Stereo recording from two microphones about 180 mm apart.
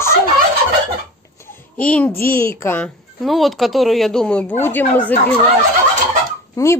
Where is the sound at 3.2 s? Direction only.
Centre (ahead or behind).